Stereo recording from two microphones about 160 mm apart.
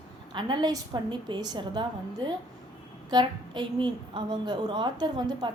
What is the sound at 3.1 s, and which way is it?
A woman's voice, 25° right (ahead or behind).